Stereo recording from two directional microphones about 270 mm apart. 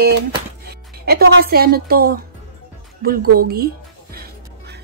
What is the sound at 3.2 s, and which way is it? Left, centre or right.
Speech, right.